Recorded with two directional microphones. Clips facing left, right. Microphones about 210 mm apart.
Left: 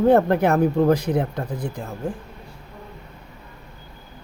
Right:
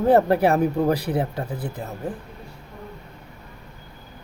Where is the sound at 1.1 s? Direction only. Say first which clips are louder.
Left 2 dB; 5° right (ahead or behind).